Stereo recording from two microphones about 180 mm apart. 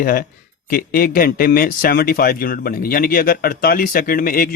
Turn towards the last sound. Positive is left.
turn(degrees=50)  # may be behind; listen again after turning